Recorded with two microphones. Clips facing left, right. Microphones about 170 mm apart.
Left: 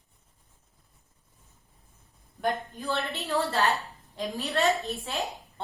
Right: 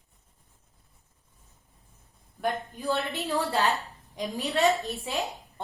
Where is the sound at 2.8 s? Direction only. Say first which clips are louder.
Right 2 dB; 15° right (ahead or behind).